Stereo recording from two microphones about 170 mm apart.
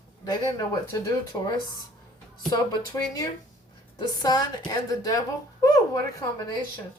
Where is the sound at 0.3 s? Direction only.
20° left (ahead or behind).